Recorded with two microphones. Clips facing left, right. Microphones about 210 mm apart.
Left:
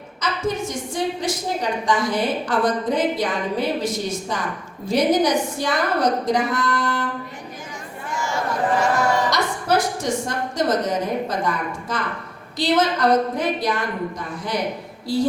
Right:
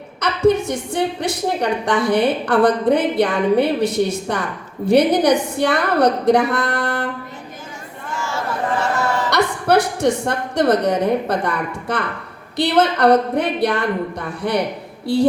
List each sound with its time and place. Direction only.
0.2 s a woman's voice: 65° right (ahead or behind)
8.1 s chatter: 15° left (ahead or behind)
9.3 s a woman's voice: 65° right (ahead or behind)